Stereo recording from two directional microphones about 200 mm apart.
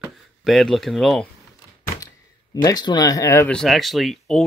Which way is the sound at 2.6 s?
20° left (ahead or behind).